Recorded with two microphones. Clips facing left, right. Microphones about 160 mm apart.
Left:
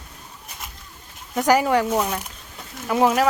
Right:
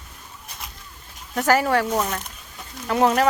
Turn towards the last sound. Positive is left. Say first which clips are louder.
# even
turn(degrees=5)  # may be behind; listen again after turning